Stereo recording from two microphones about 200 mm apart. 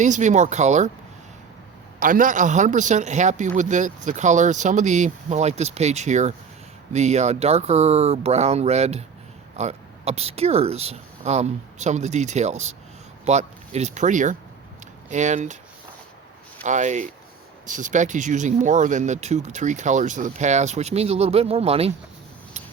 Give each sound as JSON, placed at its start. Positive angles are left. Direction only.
{"t": 0.0, "sound": "a man's voice", "side_deg": -40}
{"t": 2.0, "sound": "a man's voice", "side_deg": -40}
{"t": 16.6, "sound": "a man's voice", "side_deg": -35}